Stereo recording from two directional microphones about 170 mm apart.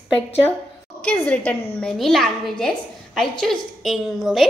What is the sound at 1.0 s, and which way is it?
A woman's voice, 5° left (ahead or behind).